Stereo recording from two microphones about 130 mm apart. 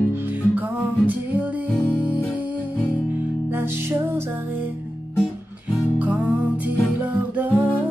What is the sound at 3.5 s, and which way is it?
Music, 20° right (ahead or behind).